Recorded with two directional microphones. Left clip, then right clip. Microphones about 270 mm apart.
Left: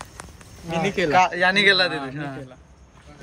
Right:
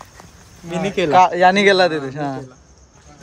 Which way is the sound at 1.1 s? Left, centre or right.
Right.